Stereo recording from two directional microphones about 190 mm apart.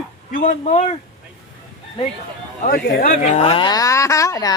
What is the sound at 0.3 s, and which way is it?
Speech, 40° left (ahead or behind).